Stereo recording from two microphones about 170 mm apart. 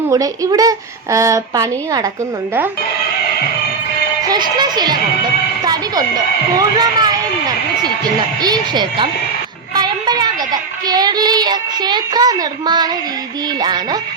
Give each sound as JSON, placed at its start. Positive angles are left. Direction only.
{"t": 0.1, "sound": "speech", "side_deg": -20}
{"t": 4.3, "sound": "speech", "side_deg": -25}
{"t": 5.6, "sound": "a sound", "side_deg": -25}
{"t": 8.4, "sound": "speech", "side_deg": -25}
{"t": 9.7, "sound": "a sound", "side_deg": -25}
{"t": 10.8, "sound": "speech", "side_deg": -25}